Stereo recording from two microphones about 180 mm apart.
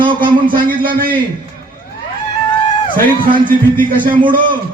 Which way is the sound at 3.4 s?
50° right (ahead or behind).